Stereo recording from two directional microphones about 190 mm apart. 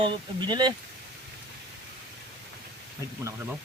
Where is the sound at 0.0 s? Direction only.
25° right (ahead or behind).